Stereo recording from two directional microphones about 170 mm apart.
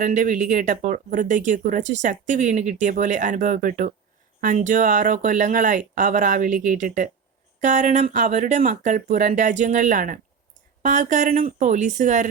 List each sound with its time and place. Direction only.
0.0 s speech: 50° right (ahead or behind)